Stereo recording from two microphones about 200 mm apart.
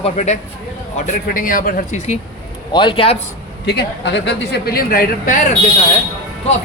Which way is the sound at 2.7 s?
25° left (ahead or behind).